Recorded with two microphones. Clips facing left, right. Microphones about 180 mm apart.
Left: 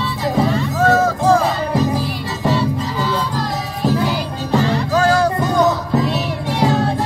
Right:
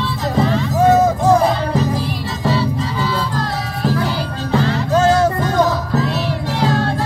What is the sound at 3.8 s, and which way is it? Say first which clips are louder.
Music: left 1 dB; 15° left (ahead or behind).